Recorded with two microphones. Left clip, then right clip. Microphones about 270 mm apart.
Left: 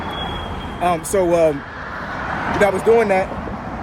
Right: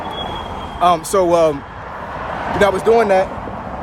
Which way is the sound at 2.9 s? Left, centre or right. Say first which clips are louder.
Right 2 dB; centre.